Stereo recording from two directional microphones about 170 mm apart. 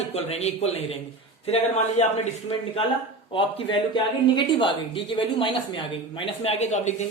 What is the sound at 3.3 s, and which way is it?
Speech, 30° left (ahead or behind).